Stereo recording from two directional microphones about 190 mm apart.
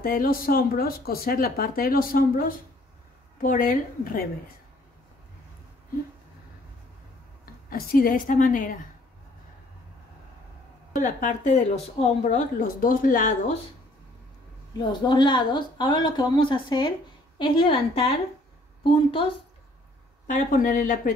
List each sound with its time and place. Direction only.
0.0 s speech: 50° left (ahead or behind)
7.7 s speech: 50° left (ahead or behind)
11.0 s speech: 45° left (ahead or behind)
12.5 s speech: 45° left (ahead or behind)
14.8 s speech: 25° left (ahead or behind)
20.2 s speech: 45° left (ahead or behind)